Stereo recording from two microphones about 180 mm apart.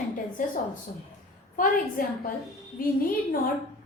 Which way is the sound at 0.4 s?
45° left (ahead or behind).